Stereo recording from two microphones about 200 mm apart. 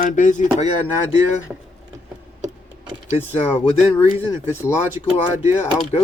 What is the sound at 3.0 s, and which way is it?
Speech, 30° left (ahead or behind).